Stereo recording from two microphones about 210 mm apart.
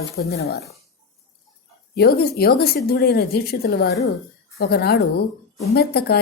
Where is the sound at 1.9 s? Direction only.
50° left (ahead or behind).